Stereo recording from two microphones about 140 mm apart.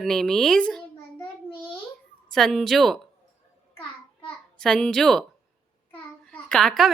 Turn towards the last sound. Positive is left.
turn(degrees=0)  # may be behind; listen again after turning